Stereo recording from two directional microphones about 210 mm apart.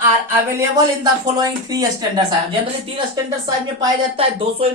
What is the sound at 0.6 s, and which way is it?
Speech, 15° right (ahead or behind).